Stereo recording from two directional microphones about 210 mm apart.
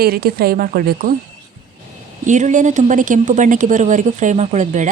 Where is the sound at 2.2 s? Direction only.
35° right (ahead or behind).